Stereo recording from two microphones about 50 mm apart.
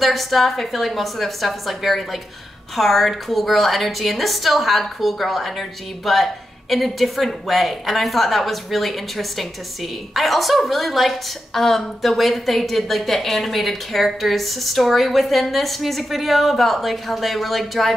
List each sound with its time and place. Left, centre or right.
0.0 s a woman's voice: centre